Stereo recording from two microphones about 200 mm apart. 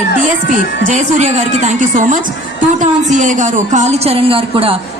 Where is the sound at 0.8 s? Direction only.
35° right (ahead or behind).